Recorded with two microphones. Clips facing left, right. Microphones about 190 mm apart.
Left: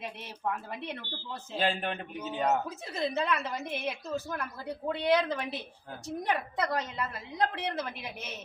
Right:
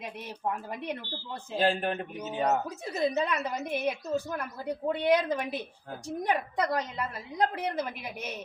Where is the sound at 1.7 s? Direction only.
40° right (ahead or behind).